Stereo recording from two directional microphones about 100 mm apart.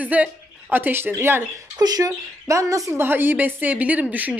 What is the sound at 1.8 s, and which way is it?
Speech, 40° right (ahead or behind).